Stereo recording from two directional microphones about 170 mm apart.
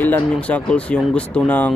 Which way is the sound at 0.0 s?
10° left (ahead or behind).